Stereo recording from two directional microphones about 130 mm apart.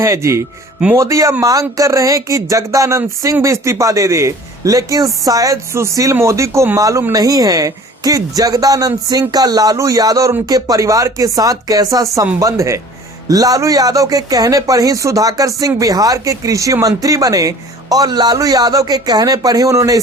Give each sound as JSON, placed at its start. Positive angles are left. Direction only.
{"t": 0.0, "sound": "speech", "side_deg": -25}